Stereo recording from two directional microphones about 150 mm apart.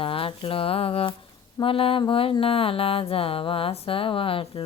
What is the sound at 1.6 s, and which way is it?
Mantra, 35° left (ahead or behind).